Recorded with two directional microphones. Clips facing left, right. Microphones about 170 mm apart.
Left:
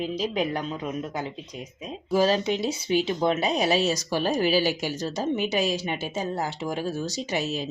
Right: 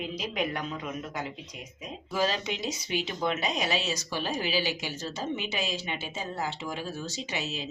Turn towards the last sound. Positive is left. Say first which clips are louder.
# left 7 dB
turn(degrees=45)  # may be behind; listen again after turning